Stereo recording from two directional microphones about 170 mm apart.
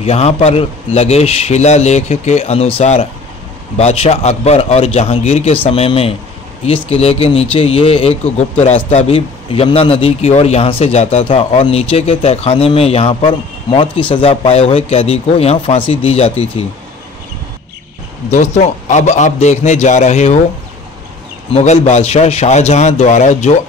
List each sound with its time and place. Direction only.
0.0 s a man's voice: 35° left (ahead or behind)
18.3 s a man's voice: 45° left (ahead or behind)
21.5 s a man's voice: 35° left (ahead or behind)